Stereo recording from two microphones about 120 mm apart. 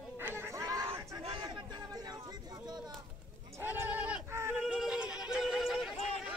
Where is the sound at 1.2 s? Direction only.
40° right (ahead or behind).